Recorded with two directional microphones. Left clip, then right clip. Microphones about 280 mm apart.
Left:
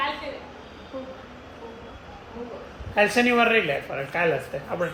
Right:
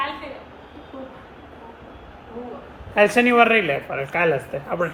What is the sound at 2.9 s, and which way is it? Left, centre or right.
Speech, right.